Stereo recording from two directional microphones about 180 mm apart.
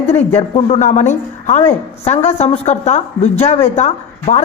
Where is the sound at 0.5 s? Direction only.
35° left (ahead or behind).